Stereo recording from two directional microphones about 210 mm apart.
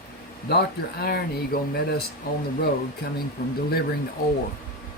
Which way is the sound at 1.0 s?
45° left (ahead or behind).